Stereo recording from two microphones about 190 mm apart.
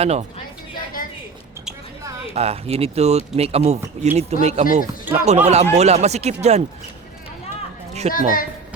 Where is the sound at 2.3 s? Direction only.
35° right (ahead or behind).